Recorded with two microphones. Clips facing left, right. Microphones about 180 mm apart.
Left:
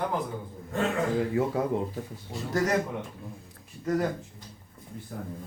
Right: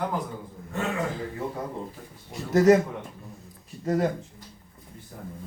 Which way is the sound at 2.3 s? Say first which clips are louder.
Right 9 dB; 20° right (ahead or behind).